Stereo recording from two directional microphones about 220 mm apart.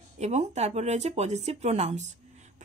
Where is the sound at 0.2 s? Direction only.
30° right (ahead or behind).